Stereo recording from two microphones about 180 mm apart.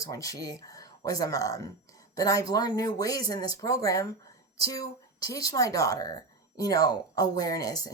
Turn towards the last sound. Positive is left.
turn(degrees=20)  # may be behind; listen again after turning